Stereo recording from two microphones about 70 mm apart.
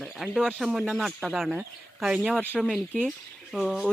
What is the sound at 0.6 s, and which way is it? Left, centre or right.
Speech, centre.